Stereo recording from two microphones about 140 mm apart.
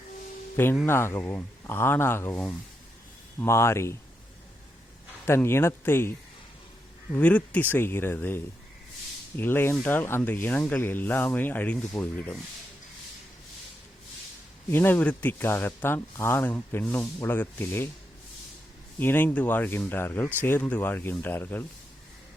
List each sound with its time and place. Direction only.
0.5 s speech: 15° left (ahead or behind)
5.2 s speech: 15° left (ahead or behind)
14.7 s speech: 15° left (ahead or behind)
18.9 s speech: 15° left (ahead or behind)